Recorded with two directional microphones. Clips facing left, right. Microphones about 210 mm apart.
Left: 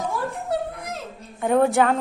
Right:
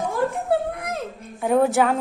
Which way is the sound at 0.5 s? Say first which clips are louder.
Right 4 dB; 55° right (ahead or behind).